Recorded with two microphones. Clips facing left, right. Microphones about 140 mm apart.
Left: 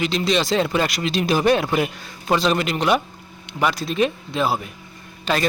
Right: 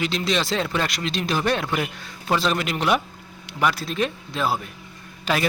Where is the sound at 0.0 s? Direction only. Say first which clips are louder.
Left 3 dB; centre (ahead or behind).